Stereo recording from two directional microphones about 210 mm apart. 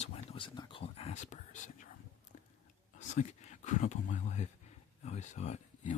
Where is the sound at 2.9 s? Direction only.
35° left (ahead or behind).